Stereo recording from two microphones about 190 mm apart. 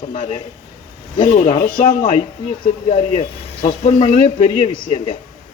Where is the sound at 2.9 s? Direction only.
30° left (ahead or behind).